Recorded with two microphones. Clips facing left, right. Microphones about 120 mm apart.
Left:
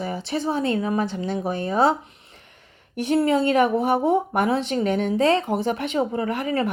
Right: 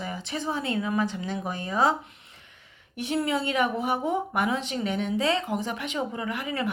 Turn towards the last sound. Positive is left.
turn(degrees=40)  # may be behind; listen again after turning